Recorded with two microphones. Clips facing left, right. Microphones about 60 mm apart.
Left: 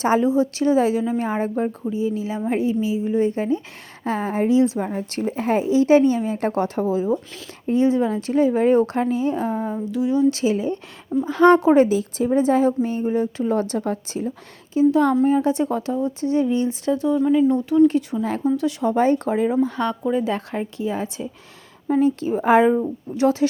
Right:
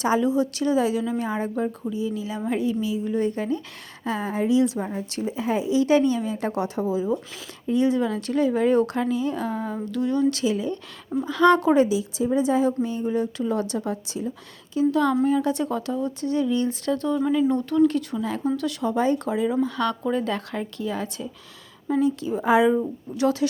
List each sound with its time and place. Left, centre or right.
0.0 s a woman's voice: left
4.0 s a woman's voice: left
9.8 s a sound: centre
10.3 s a woman's voice: left; by 17.2 s centre
17.3 s a sound: centre
17.8 s speech: left
18.2 s a woman's voice: left
18.4 s speech: left
18.9 s a woman's voice: left
19.9 s a sound: centre
20.3 s speech: left
21.8 s a woman's voice: left